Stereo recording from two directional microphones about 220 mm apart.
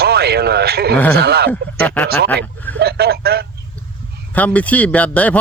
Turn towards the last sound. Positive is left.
turn(degrees=5)  # may be behind; listen again after turning